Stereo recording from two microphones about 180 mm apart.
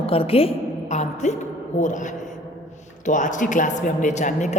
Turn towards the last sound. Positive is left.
turn(degrees=40)  # may be behind; listen again after turning